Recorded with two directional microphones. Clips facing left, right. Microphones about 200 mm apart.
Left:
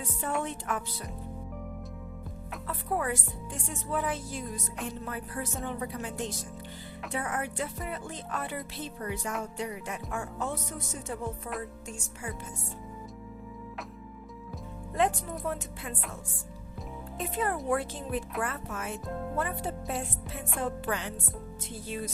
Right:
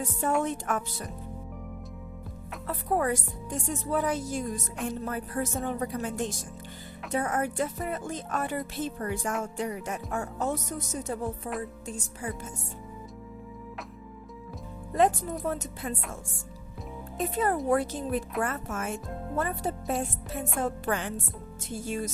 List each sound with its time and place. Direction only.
0.0 s speech: 45° right (ahead or behind)
2.6 s speech: 45° right (ahead or behind)
9.6 s music: 45° right (ahead or behind)
14.9 s music: 40° right (ahead or behind)
17.3 s music: 40° right (ahead or behind)
18.4 s speech: 45° right (ahead or behind)
19.4 s music: 40° right (ahead or behind)
20.6 s speech: 45° right (ahead or behind)